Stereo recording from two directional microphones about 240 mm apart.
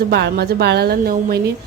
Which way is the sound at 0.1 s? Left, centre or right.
Right.